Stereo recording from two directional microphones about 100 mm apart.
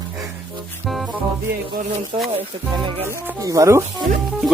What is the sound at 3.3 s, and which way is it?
Speech, 35° right (ahead or behind).